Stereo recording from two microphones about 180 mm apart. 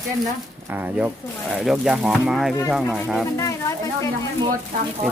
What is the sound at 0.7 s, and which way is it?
Speech, 10° right (ahead or behind).